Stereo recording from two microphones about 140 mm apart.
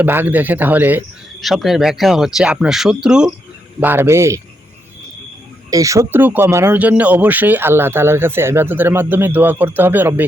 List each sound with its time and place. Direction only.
0.0 s speech: 15° right (ahead or behind)
1.4 s speech: centre (ahead or behind); by 4.4 s 20° right (ahead or behind)
5.7 s speech: 25° right (ahead or behind)